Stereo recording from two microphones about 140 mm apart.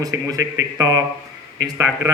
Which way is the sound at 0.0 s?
25° right (ahead or behind).